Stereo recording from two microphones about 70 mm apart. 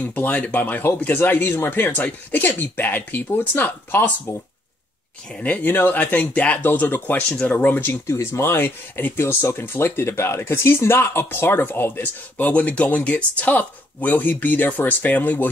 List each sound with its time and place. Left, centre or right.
0.0 s speech: left
5.3 s speech: centre
7.2 s speech: centre
7.5 s speech: left
8.1 s speech: left